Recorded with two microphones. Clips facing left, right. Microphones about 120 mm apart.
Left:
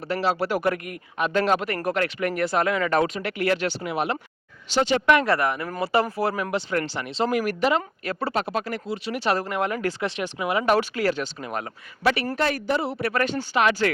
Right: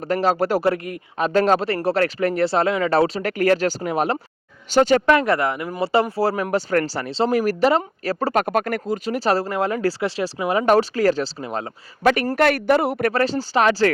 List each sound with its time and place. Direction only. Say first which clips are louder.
0.1 s speech: right 5 dB; 40° right (ahead or behind)
0.6 s speech: right 4 dB; 30° right (ahead or behind)
5.2 s speech: right 2 dB; 25° right (ahead or behind)
8.3 s speech: right 7 dB; 50° right (ahead or behind); by 11.6 s 30° right (ahead or behind)
12.0 s a woman's voice: right 5 dB; 45° right (ahead or behind)
12.4 s a man's voice: right 7 dB; 65° right (ahead or behind)
13.1 s speech: right 1 dB; 35° right (ahead or behind)